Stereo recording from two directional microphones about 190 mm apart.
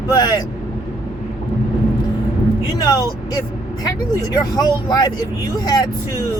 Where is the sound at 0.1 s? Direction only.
20° left (ahead or behind).